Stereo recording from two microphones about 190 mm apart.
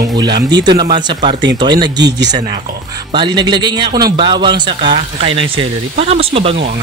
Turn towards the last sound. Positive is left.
turn(degrees=-30)  # may be behind; listen again after turning